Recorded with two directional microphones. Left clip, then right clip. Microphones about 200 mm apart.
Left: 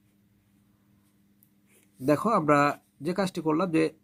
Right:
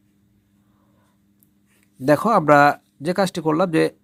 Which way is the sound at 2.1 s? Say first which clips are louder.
Right 8 dB; 35° right (ahead or behind).